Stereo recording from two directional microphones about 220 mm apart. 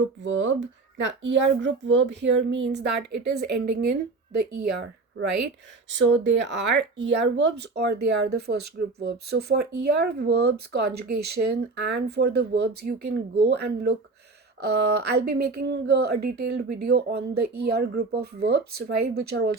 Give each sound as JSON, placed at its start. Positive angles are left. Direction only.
{"t": 0.0, "sound": "speech", "side_deg": -60}
{"t": 6.0, "sound": "speech", "side_deg": -55}